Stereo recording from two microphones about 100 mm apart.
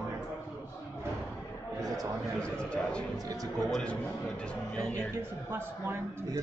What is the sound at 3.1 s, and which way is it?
Speech, 35° right (ahead or behind).